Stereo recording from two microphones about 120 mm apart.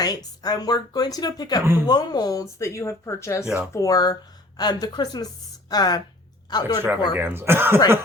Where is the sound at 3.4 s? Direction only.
5° right (ahead or behind).